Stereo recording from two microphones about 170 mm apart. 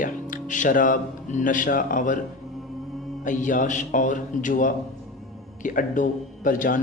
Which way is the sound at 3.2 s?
50° left (ahead or behind).